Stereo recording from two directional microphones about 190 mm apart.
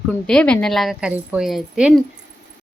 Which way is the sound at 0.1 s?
5° left (ahead or behind).